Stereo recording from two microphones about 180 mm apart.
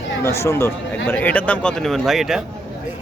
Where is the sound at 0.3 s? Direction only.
15° left (ahead or behind); by 2.4 s centre (ahead or behind).